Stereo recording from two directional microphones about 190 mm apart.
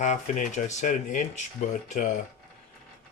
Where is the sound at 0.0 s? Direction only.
40° left (ahead or behind).